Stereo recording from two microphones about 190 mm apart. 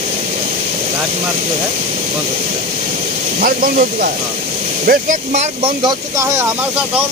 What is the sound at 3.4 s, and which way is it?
Speech, 50° right (ahead or behind).